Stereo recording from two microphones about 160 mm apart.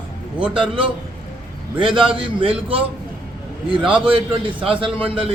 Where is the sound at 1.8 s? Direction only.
35° right (ahead or behind).